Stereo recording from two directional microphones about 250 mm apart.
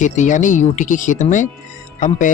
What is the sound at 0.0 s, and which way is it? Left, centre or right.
Speech, left.